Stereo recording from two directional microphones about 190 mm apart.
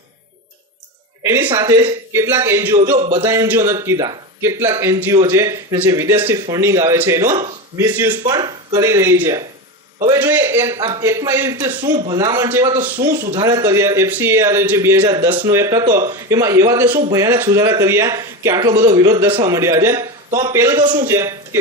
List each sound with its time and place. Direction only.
1.2 s a man's voice: 10° right (ahead or behind)
7.3 s speech: 35° right (ahead or behind)
7.8 s a man's voice: 10° right (ahead or behind)
8.3 s a man's voice: 20° right (ahead or behind)
11.9 s a man's voice: 25° right (ahead or behind)
13.0 s a man's voice: 25° right (ahead or behind)
15.0 s speech: 30° right (ahead or behind)
15.3 s a man's voice: 10° right (ahead or behind)
15.9 s speech: 45° right (ahead or behind)
16.1 s a man's voice: 15° right (ahead or behind)
19.5 s a man's voice: 15° right (ahead or behind)